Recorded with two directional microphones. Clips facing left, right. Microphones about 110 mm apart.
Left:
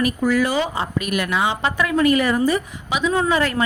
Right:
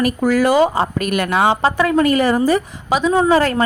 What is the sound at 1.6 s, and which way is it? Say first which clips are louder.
Speech: right 4 dB; 35° right (ahead or behind).